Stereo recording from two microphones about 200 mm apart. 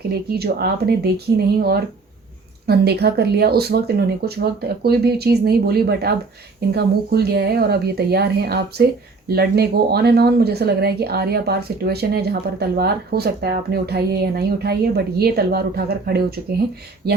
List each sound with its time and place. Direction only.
0.3 s speech: 50° right (ahead or behind)